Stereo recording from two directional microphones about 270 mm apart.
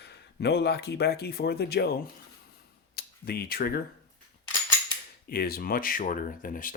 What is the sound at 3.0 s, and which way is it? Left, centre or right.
Speech, left.